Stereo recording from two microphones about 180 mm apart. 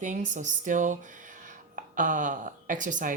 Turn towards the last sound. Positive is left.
turn(degrees=-45)  # may be behind; listen again after turning